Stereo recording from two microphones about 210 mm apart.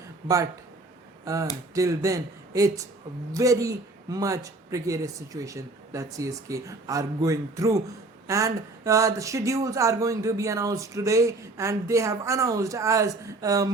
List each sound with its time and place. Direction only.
1.2 s speech: 15° right (ahead or behind)